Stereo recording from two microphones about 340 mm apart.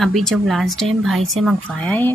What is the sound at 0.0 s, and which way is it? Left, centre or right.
Speech, centre.